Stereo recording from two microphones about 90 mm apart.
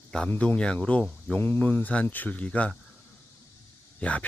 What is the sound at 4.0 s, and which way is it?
Speech, 15° left (ahead or behind).